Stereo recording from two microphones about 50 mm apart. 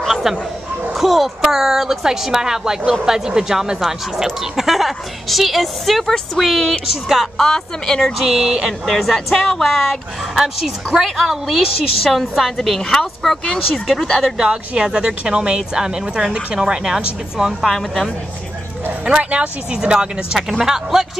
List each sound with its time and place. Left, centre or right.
0.1 s bow-wow: centre
0.9 s a woman's voice: centre
8.2 s a woman's voice: centre
14.2 s speech: centre
17.7 s a woman's voice: centre
19.0 s speech: right